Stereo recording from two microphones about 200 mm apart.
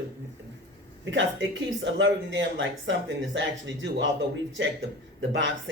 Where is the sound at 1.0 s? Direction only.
65° right (ahead or behind).